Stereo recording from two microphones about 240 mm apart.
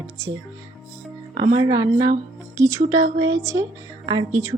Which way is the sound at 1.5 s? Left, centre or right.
Centre.